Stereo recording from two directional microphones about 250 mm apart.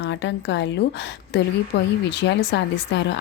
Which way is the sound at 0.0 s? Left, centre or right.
Left.